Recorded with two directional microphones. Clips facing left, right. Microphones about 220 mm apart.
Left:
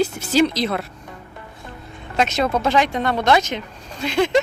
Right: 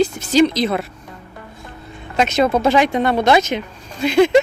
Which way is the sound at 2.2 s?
Centre (ahead or behind).